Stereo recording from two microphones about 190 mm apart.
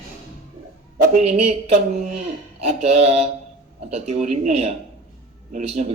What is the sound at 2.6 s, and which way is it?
A man's voice, 35° right (ahead or behind).